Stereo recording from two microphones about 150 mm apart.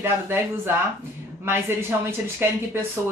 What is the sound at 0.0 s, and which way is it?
Speech, 15° right (ahead or behind).